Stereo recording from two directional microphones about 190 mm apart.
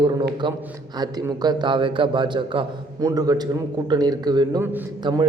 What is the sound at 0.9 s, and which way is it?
A man's voice, 20° right (ahead or behind).